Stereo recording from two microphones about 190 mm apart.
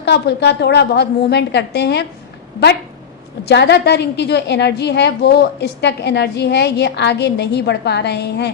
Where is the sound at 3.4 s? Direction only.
65° left (ahead or behind).